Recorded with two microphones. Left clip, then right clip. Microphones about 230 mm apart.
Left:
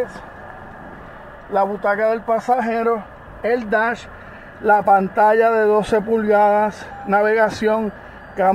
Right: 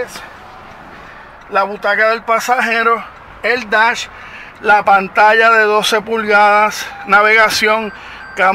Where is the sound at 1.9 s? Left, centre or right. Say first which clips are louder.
Right 9 dB; right.